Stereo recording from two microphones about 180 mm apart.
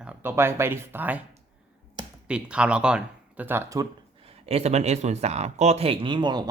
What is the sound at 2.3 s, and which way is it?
Speech, 5° right (ahead or behind).